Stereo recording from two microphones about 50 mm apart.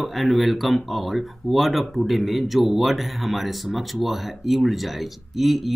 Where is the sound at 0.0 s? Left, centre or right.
Centre.